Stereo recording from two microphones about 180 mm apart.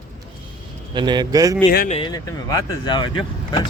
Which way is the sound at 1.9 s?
25° left (ahead or behind).